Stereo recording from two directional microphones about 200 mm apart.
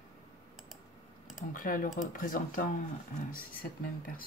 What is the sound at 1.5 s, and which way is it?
Speech, 45° left (ahead or behind).